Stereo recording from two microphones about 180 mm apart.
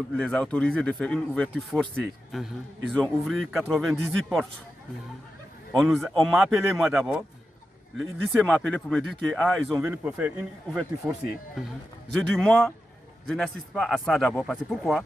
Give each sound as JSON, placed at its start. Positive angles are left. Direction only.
{"t": 0.2, "sound": "speech", "side_deg": 5}
{"t": 5.7, "sound": "speech", "side_deg": 0}
{"t": 12.2, "sound": "speech", "side_deg": 5}